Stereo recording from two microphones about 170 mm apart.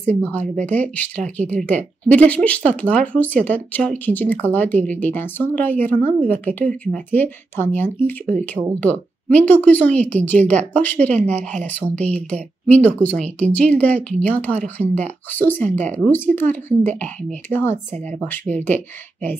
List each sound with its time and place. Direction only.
0.3 s speech: 10° left (ahead or behind)
11.1 s speech: 45° right (ahead or behind)
11.9 s speech: 10° left (ahead or behind)